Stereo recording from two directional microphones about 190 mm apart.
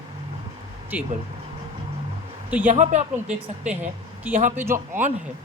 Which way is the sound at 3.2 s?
5° right (ahead or behind).